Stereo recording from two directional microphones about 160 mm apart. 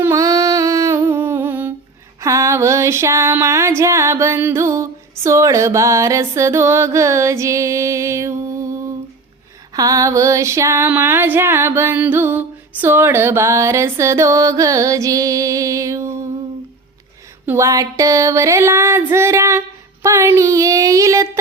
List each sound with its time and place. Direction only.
0.0 s humming: 20° right (ahead or behind)
2.2 s female singing: 20° right (ahead or behind)
9.7 s female singing: 20° right (ahead or behind)
17.4 s a sound: 15° right (ahead or behind)